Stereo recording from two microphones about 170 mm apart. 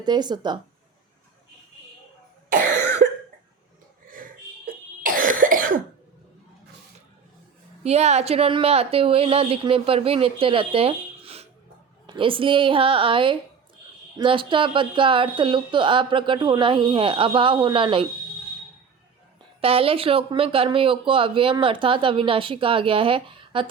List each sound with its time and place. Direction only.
0.0 s speech: 25° right (ahead or behind)
2.5 s cough: 50° right (ahead or behind)
4.1 s cough: 55° right (ahead or behind)
7.9 s speech: 40° right (ahead or behind)
19.6 s speech: 35° right (ahead or behind)